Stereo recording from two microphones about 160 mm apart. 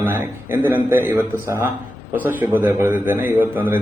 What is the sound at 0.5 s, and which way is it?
A man's voice, 15° right (ahead or behind).